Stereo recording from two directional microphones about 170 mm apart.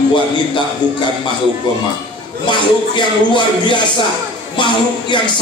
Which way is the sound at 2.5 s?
30° left (ahead or behind).